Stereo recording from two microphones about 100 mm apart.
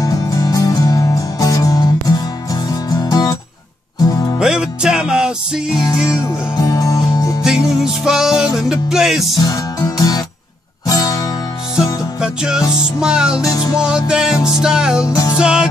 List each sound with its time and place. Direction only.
0.0 s music: 35° left (ahead or behind)
4.4 s music: 10° right (ahead or behind)
6.6 s music: 35° left (ahead or behind)
7.4 s music: 5° right (ahead or behind)
9.4 s music: 40° left (ahead or behind)
11.7 s music: 5° right (ahead or behind)